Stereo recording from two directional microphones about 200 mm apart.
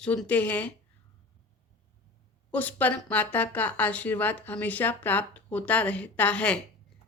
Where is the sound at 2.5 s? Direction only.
10° left (ahead or behind).